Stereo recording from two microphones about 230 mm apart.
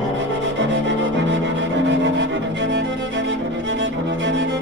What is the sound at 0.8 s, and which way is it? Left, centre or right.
Cello, right.